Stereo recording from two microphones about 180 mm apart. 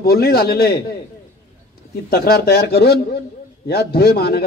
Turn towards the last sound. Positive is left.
turn(degrees=65)  # may be behind; listen again after turning